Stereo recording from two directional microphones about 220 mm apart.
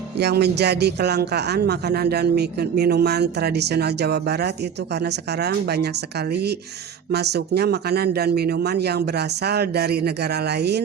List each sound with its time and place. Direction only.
0.2 s speech: 50° right (ahead or behind)